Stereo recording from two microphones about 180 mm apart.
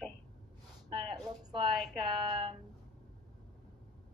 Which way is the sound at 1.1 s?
25° right (ahead or behind).